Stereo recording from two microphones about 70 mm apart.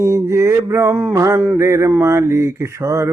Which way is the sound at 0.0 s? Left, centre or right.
Right.